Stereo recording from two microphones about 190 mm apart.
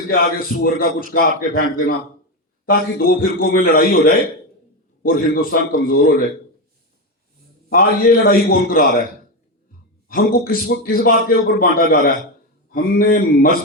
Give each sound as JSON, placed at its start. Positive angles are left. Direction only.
{"t": 0.3, "sound": "a man's voice", "side_deg": 50}
{"t": 7.7, "sound": "a man's voice", "side_deg": 50}
{"t": 10.1, "sound": "a man's voice", "side_deg": 50}